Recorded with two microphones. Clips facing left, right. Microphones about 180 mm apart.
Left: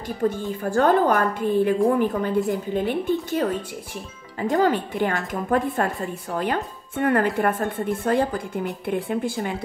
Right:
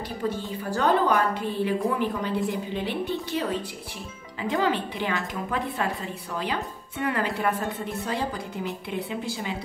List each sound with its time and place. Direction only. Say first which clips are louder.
0.2 s speech: left 7 dB; 50° left (ahead or behind)